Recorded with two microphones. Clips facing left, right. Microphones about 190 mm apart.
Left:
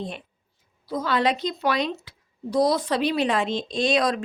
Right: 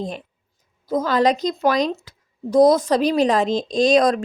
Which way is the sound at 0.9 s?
45° right (ahead or behind).